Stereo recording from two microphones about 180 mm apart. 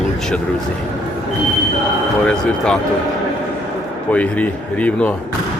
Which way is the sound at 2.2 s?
5° left (ahead or behind).